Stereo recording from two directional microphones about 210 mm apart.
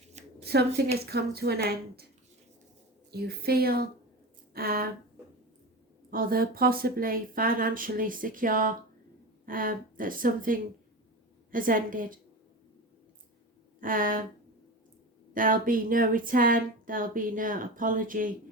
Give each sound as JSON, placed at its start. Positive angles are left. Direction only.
{"t": 0.1, "sound": "shuffling cards", "side_deg": -30}
{"t": 1.1, "sound": "speech", "side_deg": -50}
{"t": 3.1, "sound": "speech", "side_deg": -50}
{"t": 6.1, "sound": "speech", "side_deg": -45}
{"t": 13.7, "sound": "speech", "side_deg": -40}
{"t": 15.3, "sound": "speech", "side_deg": -40}